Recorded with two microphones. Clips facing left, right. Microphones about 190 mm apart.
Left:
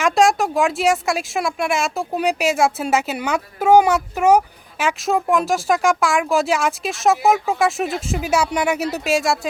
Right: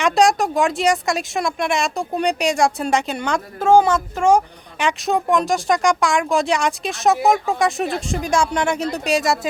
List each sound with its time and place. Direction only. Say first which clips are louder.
0.0 s speech: even; centre (ahead or behind)